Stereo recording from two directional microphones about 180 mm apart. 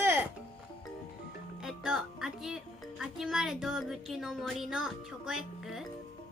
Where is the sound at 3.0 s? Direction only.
5° right (ahead or behind).